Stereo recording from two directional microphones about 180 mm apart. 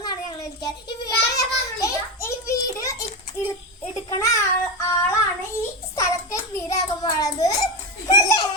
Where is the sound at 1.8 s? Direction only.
15° left (ahead or behind).